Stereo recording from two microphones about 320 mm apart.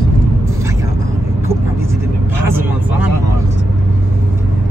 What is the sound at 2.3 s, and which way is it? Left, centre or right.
Speech, centre.